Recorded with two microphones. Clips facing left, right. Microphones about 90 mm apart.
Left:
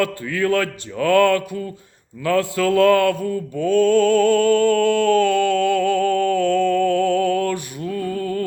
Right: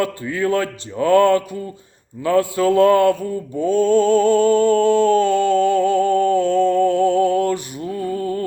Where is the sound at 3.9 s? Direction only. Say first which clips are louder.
Right 3 dB; 55° left (ahead or behind).